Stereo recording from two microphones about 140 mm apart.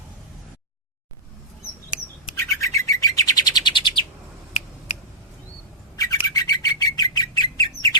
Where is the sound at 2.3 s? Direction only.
20° left (ahead or behind).